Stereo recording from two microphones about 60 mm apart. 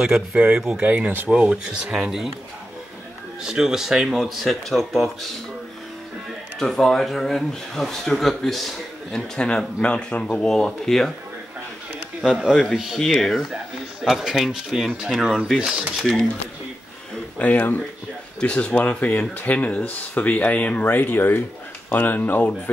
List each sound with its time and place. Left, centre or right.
0.4 s speech: centre
0.8 s speech: right
1.3 s speech: centre
3.4 s speech: centre
6.6 s speech: centre
9.4 s speech: centre
12.2 s speech: centre
16.0 s speech: centre
17.6 s speech: left
18.4 s speech: centre
18.9 s speech: left
20.8 s speech: left